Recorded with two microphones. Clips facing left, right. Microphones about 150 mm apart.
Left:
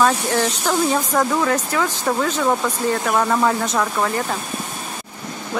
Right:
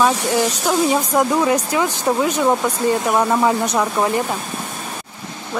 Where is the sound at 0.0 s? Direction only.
10° right (ahead or behind).